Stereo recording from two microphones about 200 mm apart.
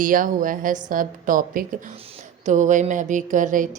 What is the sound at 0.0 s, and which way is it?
A woman's voice, 40° right (ahead or behind).